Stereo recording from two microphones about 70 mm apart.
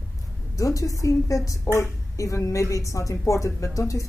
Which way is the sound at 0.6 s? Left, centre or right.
Left.